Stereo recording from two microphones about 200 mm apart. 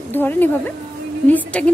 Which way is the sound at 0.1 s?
10° left (ahead or behind).